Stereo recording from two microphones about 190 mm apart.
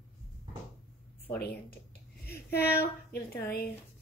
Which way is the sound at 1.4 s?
55° left (ahead or behind).